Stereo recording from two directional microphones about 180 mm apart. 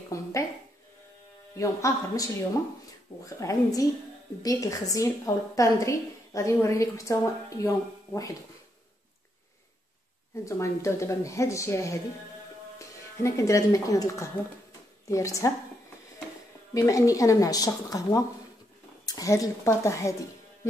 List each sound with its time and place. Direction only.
0.1 s a sound: 15° left (ahead or behind)
1.5 s a woman's voice: 15° left (ahead or behind)
3.3 s a woman's voice: 20° left (ahead or behind)
10.4 s a woman's voice: 15° left (ahead or behind)
16.7 s a woman's voice: 20° left (ahead or behind)